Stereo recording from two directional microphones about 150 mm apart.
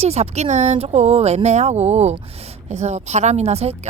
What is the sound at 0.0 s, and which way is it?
A woman's voice, 45° right (ahead or behind).